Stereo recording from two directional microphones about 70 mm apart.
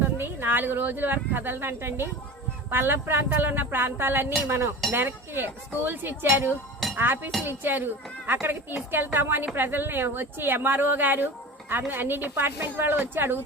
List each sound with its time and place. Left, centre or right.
0.0 s a woman's voice: right